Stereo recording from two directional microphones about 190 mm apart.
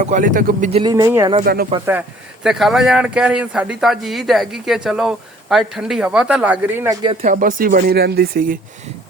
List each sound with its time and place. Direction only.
0.0 s speech: 40° right (ahead or behind)
0.7 s speech: 25° right (ahead or behind)
1.9 s speech: 5° right (ahead or behind)
7.0 s speech: 25° right (ahead or behind)
7.3 s speech: 45° right (ahead or behind)